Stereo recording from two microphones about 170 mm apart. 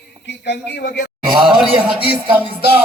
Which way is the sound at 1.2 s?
25° right (ahead or behind).